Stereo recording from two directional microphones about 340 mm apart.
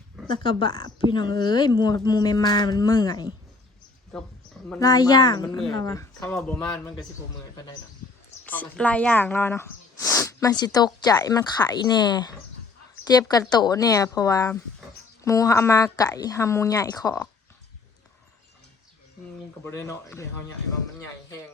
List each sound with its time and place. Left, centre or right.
0.3 s speech: centre
4.7 s speech: centre
8.4 s speech: centre
19.6 s speech: centre